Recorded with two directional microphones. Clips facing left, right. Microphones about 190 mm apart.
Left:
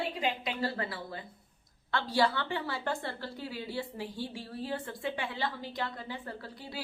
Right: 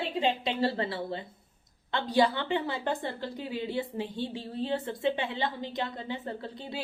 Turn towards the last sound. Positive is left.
turn(degrees=-20)  # may be behind; listen again after turning